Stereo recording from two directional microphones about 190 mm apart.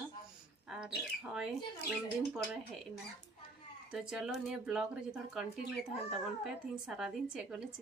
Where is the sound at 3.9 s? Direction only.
Centre (ahead or behind).